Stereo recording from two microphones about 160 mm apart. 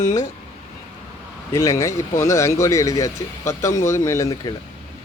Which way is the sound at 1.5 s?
20° left (ahead or behind).